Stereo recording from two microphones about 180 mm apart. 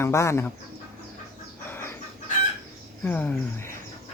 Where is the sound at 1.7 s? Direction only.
15° left (ahead or behind).